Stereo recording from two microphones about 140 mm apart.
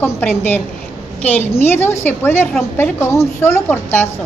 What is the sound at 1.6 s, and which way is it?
A woman's voice, 15° left (ahead or behind).